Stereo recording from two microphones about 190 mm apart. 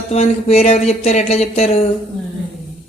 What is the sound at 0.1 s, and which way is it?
Speech, 35° left (ahead or behind).